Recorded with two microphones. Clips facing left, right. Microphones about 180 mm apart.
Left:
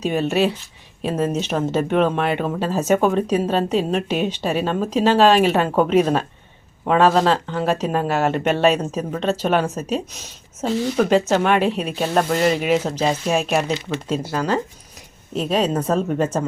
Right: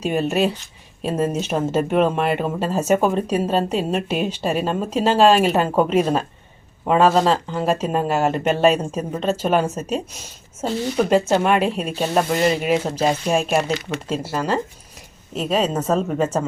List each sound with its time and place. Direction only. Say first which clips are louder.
0.0 s speech: left 1 dB; 5° right (ahead or behind)